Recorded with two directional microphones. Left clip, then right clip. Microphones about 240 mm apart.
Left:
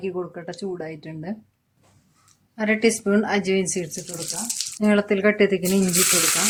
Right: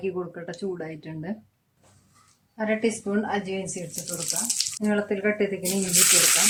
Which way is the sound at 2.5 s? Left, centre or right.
Left.